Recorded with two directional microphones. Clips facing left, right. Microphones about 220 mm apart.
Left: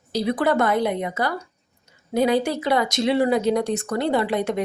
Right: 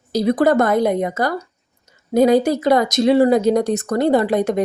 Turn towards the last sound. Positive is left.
turn(degrees=-45)  # may be behind; listen again after turning